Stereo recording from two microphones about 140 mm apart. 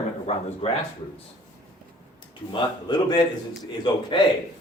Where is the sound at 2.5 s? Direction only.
30° left (ahead or behind).